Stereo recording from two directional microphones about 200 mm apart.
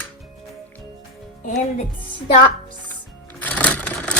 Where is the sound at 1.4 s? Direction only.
40° left (ahead or behind).